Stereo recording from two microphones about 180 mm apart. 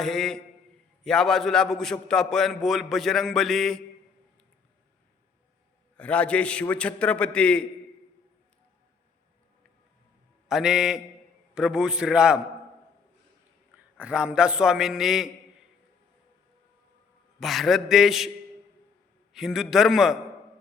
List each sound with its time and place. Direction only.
0.0 s a man's voice: centre (ahead or behind)
6.0 s a man's voice: 5° left (ahead or behind)
10.5 s a man's voice: 5° right (ahead or behind)
14.0 s a man's voice: 5° right (ahead or behind)
17.4 s a man's voice: centre (ahead or behind)
19.3 s a man's voice: centre (ahead or behind)